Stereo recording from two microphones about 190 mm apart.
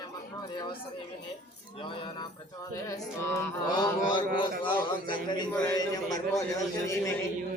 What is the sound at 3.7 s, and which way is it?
A man's voice, 20° left (ahead or behind).